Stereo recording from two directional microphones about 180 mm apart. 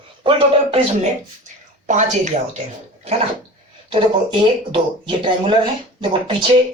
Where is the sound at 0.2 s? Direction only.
30° right (ahead or behind).